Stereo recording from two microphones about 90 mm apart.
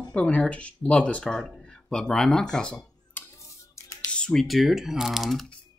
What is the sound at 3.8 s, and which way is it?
Music, 35° left (ahead or behind).